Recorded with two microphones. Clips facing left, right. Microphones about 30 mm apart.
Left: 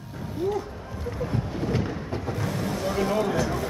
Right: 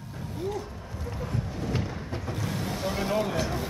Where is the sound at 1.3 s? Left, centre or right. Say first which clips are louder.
Left 3 dB; left.